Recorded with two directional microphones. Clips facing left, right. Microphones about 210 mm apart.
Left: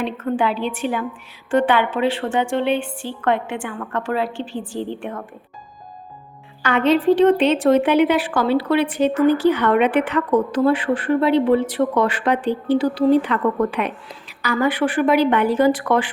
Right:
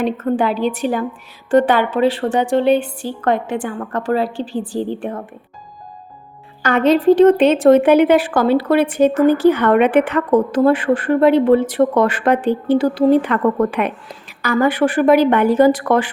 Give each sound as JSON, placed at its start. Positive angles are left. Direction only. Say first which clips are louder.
{"t": 0.0, "sound": "a woman's voice", "louder": "right 4 dB", "side_deg": -40}
{"t": 6.6, "sound": "a woman's voice", "louder": "right 3 dB", "side_deg": -40}